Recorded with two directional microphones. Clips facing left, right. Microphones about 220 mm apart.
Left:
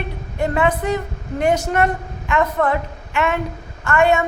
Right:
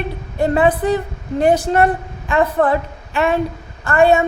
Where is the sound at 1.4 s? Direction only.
35° right (ahead or behind).